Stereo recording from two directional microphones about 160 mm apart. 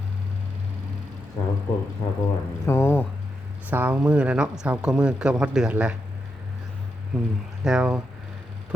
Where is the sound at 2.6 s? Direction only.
15° left (ahead or behind).